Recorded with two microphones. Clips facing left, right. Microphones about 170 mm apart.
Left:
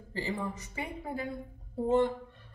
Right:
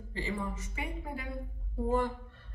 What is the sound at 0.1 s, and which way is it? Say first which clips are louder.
Speech: left 2 dB; 35° left (ahead or behind).